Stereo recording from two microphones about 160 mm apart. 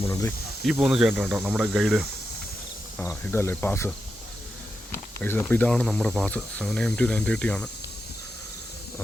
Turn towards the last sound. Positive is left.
turn(degrees=5)  # may be behind; listen again after turning